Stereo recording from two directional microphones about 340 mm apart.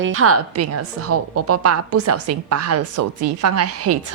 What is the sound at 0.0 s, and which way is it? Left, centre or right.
A woman's voice, right.